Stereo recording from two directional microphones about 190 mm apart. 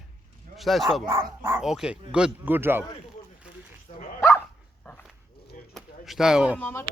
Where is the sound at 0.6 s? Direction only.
Centre (ahead or behind).